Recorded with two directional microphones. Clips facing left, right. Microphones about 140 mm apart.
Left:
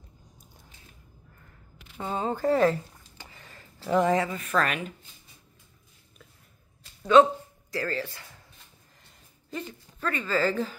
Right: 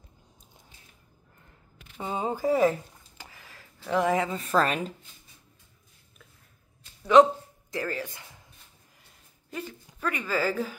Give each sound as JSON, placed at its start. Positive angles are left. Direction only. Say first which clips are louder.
{"t": 2.0, "sound": "speech", "louder": "left 1 dB", "side_deg": -15}
{"t": 3.3, "sound": "a sound", "louder": "left 2 dB", "side_deg": -5}
{"t": 4.2, "sound": "a woman's voice", "louder": "right 2 dB", "side_deg": -25}
{"t": 7.7, "sound": "speech", "louder": "left 1 dB", "side_deg": -15}
{"t": 9.5, "sound": "speech", "louder": "left 1 dB", "side_deg": -10}